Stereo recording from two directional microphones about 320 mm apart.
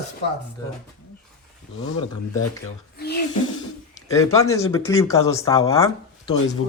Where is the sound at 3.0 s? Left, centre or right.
Left.